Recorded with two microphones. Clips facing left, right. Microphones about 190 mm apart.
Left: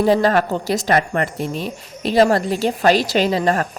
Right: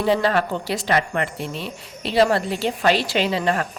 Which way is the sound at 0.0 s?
40° left (ahead or behind).